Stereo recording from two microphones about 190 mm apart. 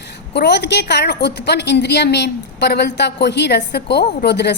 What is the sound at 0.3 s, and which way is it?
A woman's voice, 60° left (ahead or behind).